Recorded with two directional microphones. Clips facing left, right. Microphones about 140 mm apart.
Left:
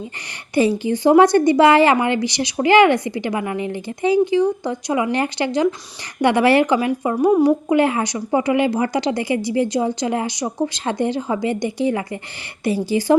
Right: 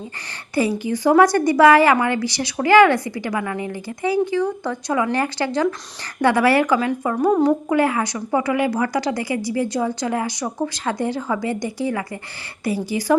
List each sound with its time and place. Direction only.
0.5 s a woman's voice: 25° left (ahead or behind)